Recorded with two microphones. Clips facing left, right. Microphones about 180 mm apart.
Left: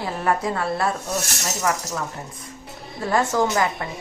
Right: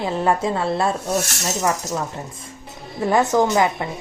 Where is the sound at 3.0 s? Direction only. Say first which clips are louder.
Right 4 dB; 20° right (ahead or behind).